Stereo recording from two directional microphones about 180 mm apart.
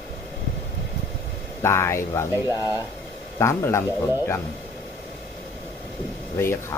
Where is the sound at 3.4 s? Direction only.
15° left (ahead or behind).